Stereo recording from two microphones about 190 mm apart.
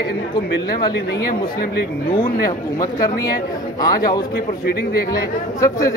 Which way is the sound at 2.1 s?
20° left (ahead or behind).